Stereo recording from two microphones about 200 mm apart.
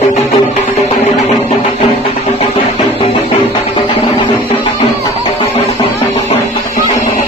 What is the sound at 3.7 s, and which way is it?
Music, 25° left (ahead or behind).